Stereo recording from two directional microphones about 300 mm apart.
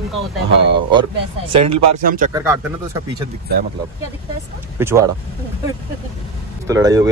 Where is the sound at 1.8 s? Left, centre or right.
Right.